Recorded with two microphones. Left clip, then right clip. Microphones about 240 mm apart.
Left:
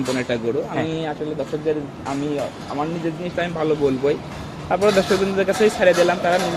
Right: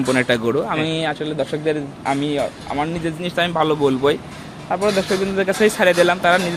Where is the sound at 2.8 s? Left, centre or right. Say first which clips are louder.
Right 2 dB; right.